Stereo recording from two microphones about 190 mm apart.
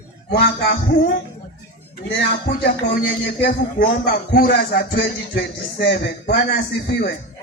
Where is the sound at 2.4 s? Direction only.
60° left (ahead or behind).